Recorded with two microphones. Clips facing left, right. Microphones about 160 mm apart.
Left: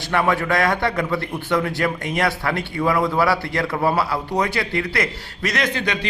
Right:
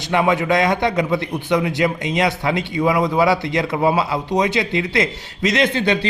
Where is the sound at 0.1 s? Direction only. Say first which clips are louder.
Right 3 dB; 15° right (ahead or behind).